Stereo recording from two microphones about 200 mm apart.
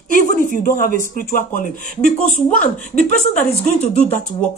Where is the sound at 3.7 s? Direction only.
35° left (ahead or behind).